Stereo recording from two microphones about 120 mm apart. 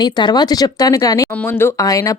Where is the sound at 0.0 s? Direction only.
40° left (ahead or behind).